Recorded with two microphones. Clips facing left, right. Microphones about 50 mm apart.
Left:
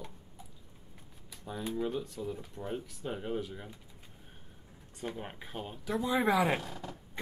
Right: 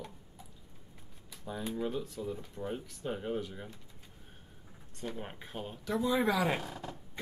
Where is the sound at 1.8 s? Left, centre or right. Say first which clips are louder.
Left 2 dB; centre.